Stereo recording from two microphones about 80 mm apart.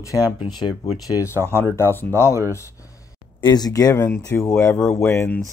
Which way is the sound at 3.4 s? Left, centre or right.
Left.